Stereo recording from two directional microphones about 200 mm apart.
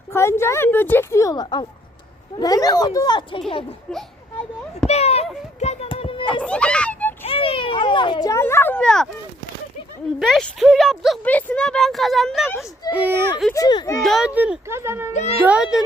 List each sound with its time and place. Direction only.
0.1 s speech: 15° left (ahead or behind)
4.9 s a sound: 30° left (ahead or behind)
6.4 s children playing: 5° left (ahead or behind)
7.3 s a sound: 30° left (ahead or behind); by 9.0 s 5° left (ahead or behind)
10.2 s speech: centre (ahead or behind)
13.5 s speech: 20° left (ahead or behind)
14.0 s speech: centre (ahead or behind)
15.1 s a child's voice: 35° left (ahead or behind)
15.4 s speech: 5° right (ahead or behind)